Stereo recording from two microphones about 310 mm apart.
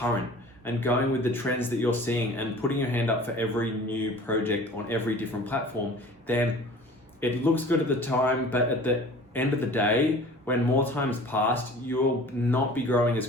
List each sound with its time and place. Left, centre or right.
0.6 s speech: centre
7.2 s speech: centre